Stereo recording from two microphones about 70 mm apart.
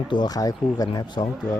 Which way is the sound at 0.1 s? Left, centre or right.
Left.